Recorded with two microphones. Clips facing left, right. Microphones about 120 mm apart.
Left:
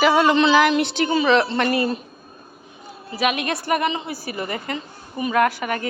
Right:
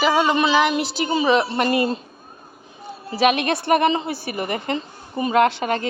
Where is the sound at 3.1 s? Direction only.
25° right (ahead or behind).